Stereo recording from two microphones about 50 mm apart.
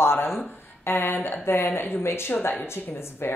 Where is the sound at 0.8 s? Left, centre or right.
Left.